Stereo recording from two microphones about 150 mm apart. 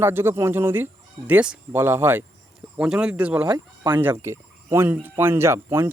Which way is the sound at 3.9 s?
15° right (ahead or behind).